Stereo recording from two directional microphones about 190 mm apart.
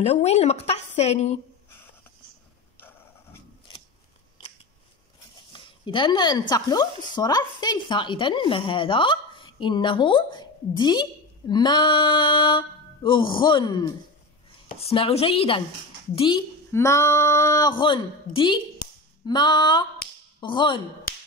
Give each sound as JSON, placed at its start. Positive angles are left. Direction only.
{"t": 0.0, "sound": "a woman's voice", "side_deg": 35}
{"t": 5.5, "sound": "a woman's voice", "side_deg": 25}
{"t": 14.9, "sound": "a woman's voice", "side_deg": 30}